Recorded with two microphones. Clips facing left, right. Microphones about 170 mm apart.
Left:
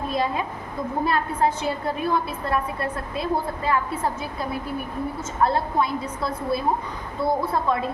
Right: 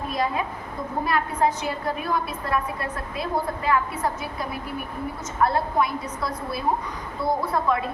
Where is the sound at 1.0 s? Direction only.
30° left (ahead or behind).